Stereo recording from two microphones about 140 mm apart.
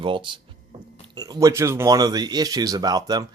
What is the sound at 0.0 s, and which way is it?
Speech, 35° right (ahead or behind).